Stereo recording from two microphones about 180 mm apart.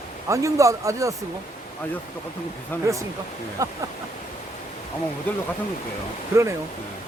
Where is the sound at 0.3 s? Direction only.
15° right (ahead or behind).